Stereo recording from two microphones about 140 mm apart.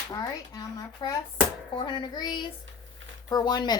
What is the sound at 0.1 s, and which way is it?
Speech, 25° left (ahead or behind).